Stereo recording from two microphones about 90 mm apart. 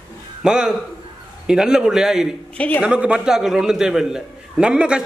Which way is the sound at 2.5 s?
15° left (ahead or behind).